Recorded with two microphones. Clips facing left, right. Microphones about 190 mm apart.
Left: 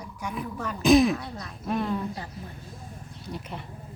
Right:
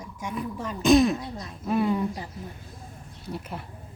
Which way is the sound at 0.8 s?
Centre (ahead or behind).